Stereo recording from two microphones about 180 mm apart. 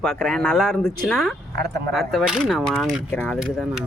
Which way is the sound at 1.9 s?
Centre (ahead or behind).